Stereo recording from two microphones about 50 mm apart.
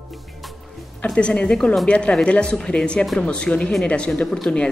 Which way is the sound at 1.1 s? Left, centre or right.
Left.